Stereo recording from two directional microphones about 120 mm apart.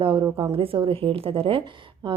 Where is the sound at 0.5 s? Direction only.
50° right (ahead or behind).